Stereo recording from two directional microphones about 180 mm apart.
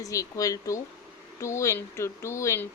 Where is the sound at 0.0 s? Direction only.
20° left (ahead or behind).